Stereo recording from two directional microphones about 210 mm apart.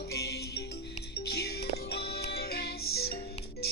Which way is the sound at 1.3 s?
50° left (ahead or behind).